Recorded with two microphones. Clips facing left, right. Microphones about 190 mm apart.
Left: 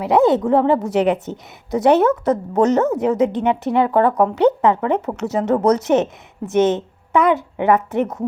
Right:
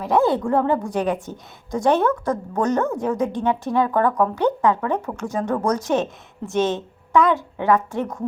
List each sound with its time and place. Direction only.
0.0 s a woman's voice: 20° left (ahead or behind)
5.1 s speech: 70° left (ahead or behind)
5.4 s a woman's voice: 20° left (ahead or behind)